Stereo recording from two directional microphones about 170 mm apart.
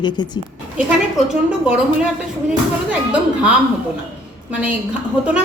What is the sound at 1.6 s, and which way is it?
Speech, 5° right (ahead or behind).